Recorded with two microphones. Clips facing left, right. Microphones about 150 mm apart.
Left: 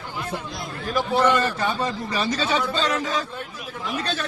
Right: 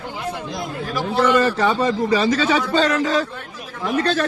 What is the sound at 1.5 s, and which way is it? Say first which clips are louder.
A man's voice: right 7 dB; 90° right.